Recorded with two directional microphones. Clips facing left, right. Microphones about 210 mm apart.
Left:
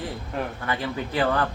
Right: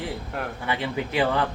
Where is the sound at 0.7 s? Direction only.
15° right (ahead or behind).